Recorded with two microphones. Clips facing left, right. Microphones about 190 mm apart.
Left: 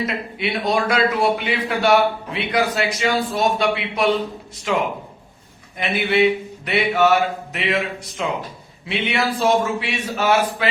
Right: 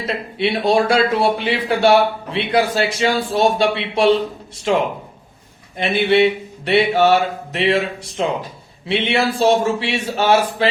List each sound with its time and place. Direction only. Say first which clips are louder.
0.0 s a man's voice: right 3 dB; 30° right (ahead or behind)